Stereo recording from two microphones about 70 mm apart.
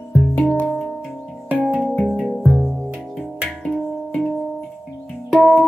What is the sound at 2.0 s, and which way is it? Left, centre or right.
Music, centre.